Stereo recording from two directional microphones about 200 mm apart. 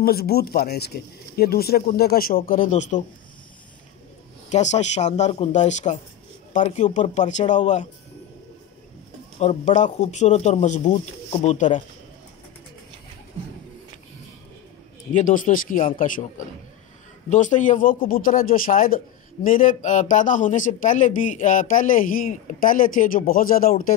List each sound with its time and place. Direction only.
0.0 s speech: 50° left (ahead or behind)
4.5 s a man's voice: 35° left (ahead or behind)
9.4 s a man's voice: 35° left (ahead or behind)
15.1 s a man's voice: 40° left (ahead or behind)